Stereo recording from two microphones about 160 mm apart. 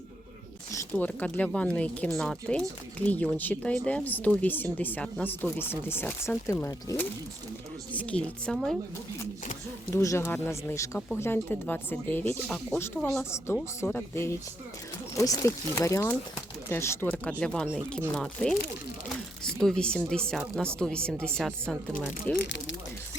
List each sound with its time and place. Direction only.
0.7 s speech: 15° left (ahead or behind)
9.9 s speech: 20° left (ahead or behind)
13.3 s speech: 15° left (ahead or behind)
19.0 s a sound: 5° left (ahead or behind)
20.6 s speech: 5° left (ahead or behind)